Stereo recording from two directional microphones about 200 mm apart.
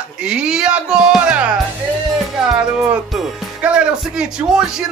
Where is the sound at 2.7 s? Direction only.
5° right (ahead or behind).